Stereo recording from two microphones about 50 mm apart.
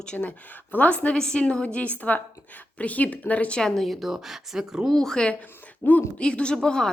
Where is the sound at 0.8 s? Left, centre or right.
Left.